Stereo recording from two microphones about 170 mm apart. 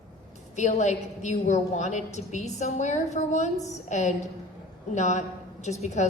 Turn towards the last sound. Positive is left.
turn(degrees=45)  # may be behind; listen again after turning